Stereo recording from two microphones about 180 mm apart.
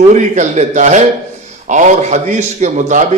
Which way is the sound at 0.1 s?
40° right (ahead or behind).